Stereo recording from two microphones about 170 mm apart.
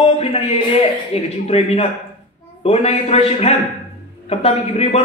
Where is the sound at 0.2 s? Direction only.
40° left (ahead or behind).